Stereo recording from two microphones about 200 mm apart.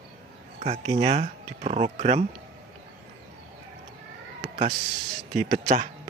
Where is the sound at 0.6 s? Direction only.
35° right (ahead or behind).